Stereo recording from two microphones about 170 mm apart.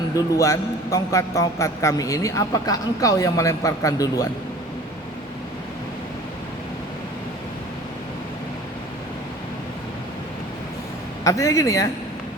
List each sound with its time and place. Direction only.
0.3 s a man's voice: 20° left (ahead or behind)
11.2 s a man's voice: 20° left (ahead or behind)